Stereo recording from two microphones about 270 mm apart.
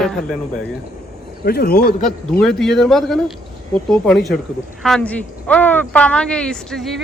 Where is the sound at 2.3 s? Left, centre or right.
Centre.